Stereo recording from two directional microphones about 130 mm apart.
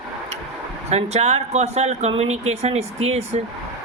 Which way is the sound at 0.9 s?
55° right (ahead or behind).